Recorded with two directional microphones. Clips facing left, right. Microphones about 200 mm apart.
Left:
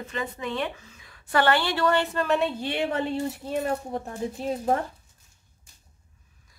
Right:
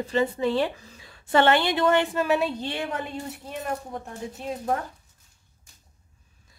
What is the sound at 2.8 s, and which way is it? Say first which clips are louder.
Speech: left 5 dB; 30° left (ahead or behind).